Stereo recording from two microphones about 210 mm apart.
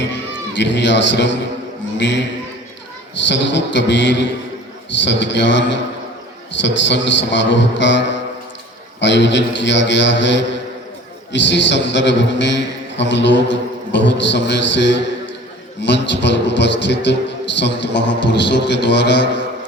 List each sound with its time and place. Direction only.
0.5 s a man's voice: 60° left (ahead or behind)
3.2 s a man's voice: 60° left (ahead or behind)